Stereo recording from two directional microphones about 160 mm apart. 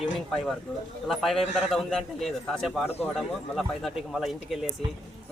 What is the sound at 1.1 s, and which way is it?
Speech, centre (ahead or behind).